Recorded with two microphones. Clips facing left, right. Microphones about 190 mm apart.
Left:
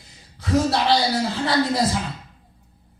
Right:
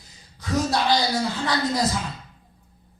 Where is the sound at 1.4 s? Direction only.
25° left (ahead or behind).